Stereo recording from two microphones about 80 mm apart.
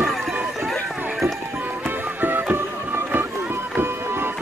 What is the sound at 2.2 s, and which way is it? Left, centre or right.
Music, right.